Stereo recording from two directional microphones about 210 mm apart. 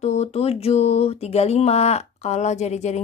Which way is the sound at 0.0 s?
30° left (ahead or behind).